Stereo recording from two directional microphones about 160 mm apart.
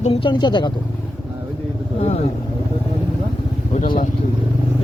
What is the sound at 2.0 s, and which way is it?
Vehicle, 40° left (ahead or behind).